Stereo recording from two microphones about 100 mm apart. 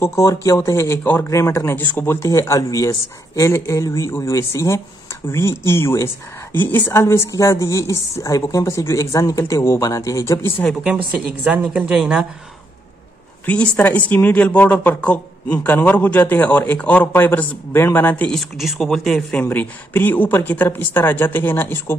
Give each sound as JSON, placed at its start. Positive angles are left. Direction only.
{"t": 0.0, "sound": "a woman's voice", "side_deg": 30}
{"t": 1.8, "sound": "a woman's voice", "side_deg": 20}
{"t": 11.1, "sound": "a woman's voice", "side_deg": -15}
{"t": 13.5, "sound": "a man's voice", "side_deg": 15}
{"t": 18.3, "sound": "speech", "side_deg": 0}
{"t": 19.5, "sound": "a woman's voice", "side_deg": 20}